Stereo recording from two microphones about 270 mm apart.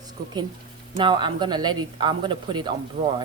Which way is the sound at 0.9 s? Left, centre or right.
Centre.